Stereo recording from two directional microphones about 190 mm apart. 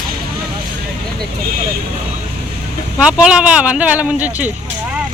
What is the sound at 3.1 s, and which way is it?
Speech, 5° right (ahead or behind).